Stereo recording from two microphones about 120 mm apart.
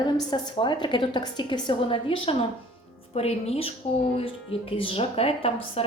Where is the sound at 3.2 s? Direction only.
60° left (ahead or behind).